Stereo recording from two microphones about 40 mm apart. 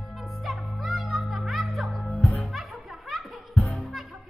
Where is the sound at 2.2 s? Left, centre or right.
Left.